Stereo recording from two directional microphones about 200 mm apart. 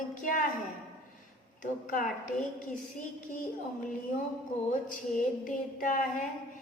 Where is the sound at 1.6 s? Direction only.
40° left (ahead or behind).